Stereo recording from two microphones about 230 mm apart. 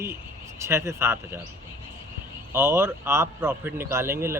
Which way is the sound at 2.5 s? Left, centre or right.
Centre.